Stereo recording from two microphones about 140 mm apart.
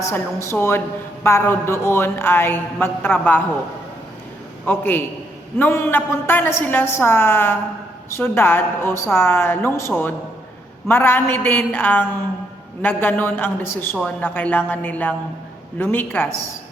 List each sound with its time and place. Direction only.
0.0 s a woman's voice: 20° left (ahead or behind)
4.6 s a woman's voice: 15° left (ahead or behind)